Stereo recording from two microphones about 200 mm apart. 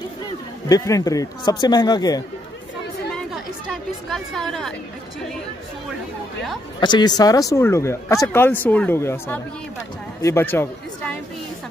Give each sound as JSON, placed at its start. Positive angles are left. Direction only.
{"t": 0.7, "sound": "a man's voice", "side_deg": 15}
{"t": 3.2, "sound": "chatter", "side_deg": 0}
{"t": 6.8, "sound": "a man's voice", "side_deg": 20}